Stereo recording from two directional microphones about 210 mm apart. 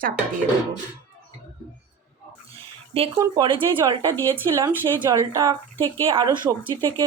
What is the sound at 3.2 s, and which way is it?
Speech, 20° right (ahead or behind).